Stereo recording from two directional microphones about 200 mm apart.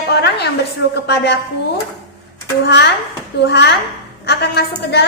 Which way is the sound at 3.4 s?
55° left (ahead or behind).